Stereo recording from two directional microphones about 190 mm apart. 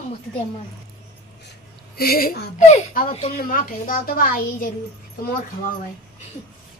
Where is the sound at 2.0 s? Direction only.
50° left (ahead or behind).